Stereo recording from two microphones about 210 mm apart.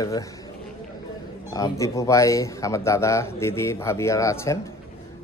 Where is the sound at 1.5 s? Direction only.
15° left (ahead or behind).